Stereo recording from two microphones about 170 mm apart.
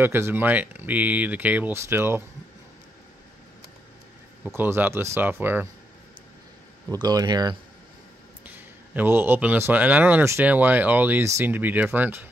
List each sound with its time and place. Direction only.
0.0 s a man's voice: 15° right (ahead or behind)
4.5 s a man's voice: 15° right (ahead or behind)
6.9 s speech: 25° right (ahead or behind)
8.5 s a man's voice: 10° right (ahead or behind)